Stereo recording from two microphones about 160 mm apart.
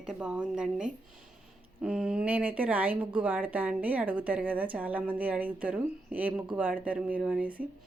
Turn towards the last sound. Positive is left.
turn(degrees=-10)  # may be behind; listen again after turning